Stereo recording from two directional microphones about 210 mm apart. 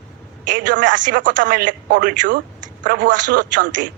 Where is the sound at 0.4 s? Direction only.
40° right (ahead or behind).